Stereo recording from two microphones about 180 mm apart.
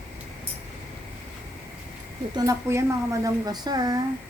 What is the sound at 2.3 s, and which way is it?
Speech, 20° right (ahead or behind).